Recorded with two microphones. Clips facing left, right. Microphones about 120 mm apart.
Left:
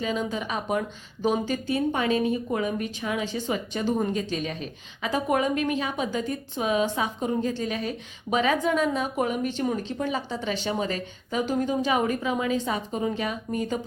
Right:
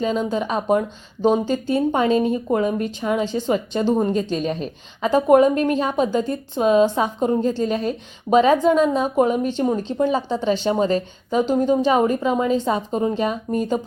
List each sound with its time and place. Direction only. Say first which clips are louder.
0.0 s a woman's voice: right 7 dB; 30° right (ahead or behind)